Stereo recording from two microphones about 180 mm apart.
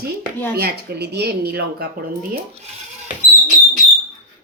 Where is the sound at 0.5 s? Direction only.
60° right (ahead or behind).